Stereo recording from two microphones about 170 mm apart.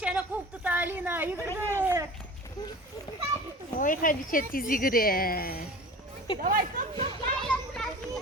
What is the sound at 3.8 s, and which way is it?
A woman's voice, 50° left (ahead or behind).